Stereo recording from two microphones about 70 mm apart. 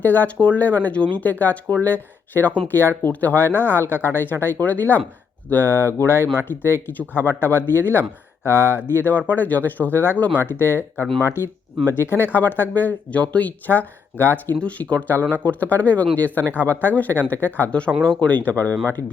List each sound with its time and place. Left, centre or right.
0.0 s speech: left
11.9 s speech: left